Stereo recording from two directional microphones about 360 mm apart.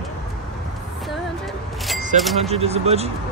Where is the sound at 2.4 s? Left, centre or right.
Centre.